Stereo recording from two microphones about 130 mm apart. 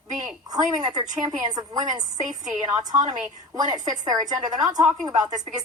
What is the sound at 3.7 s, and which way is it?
A woman's voice, 30° right (ahead or behind).